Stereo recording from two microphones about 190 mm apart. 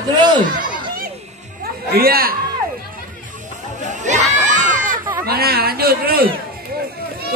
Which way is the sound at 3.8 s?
40° right (ahead or behind).